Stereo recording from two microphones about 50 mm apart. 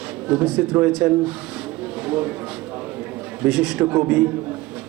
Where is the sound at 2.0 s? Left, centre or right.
Right.